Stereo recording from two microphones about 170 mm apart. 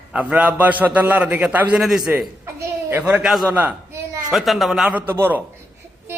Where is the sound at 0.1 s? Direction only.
10° right (ahead or behind).